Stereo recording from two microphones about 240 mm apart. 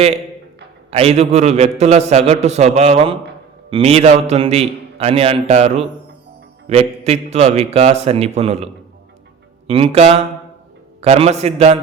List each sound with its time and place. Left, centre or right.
0.9 s a man's voice: right